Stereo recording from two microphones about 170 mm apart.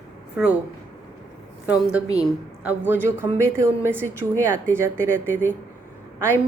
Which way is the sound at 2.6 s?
10° right (ahead or behind).